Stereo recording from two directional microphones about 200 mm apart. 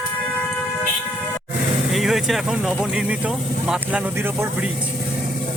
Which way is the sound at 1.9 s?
Centre (ahead or behind).